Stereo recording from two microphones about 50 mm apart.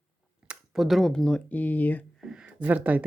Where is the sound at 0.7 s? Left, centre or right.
Centre.